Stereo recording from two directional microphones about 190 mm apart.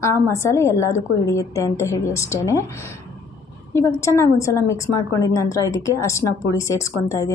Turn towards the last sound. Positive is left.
turn(degrees=15)  # may be behind; listen again after turning